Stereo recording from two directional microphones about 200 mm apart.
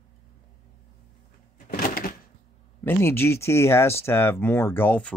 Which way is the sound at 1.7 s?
50° left (ahead or behind).